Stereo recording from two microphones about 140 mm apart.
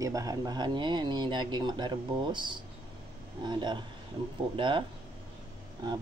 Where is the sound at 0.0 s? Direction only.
25° right (ahead or behind).